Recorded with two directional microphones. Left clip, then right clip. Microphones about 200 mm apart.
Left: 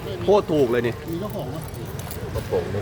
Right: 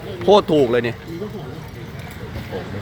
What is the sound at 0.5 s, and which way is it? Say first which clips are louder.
Speech: right 4 dB; 20° right (ahead or behind).